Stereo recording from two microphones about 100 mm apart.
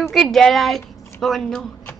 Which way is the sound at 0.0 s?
Centre (ahead or behind).